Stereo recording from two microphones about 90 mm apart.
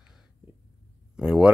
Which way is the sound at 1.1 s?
10° right (ahead or behind).